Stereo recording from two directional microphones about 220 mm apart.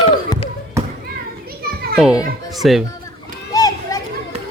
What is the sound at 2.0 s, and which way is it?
Speech, 5° right (ahead or behind).